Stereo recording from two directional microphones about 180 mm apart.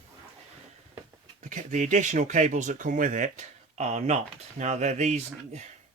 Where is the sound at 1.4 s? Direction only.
45° right (ahead or behind).